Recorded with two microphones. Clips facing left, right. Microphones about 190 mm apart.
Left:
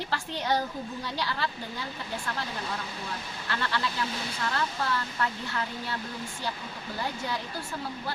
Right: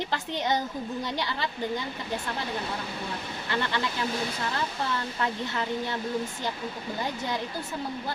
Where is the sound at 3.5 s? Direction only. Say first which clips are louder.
Right 2 dB; 20° right (ahead or behind).